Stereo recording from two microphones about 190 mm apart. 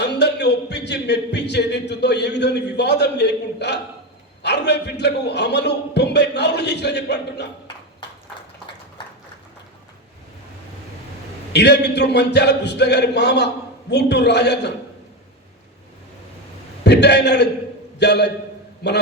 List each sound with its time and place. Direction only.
0.0 s a man's voice: 65° left (ahead or behind)
11.5 s a man's voice: 60° left (ahead or behind)
16.8 s a man's voice: 60° left (ahead or behind)